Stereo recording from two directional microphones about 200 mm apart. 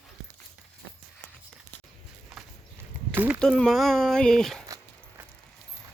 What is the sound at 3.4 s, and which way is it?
Speech, 5° left (ahead or behind).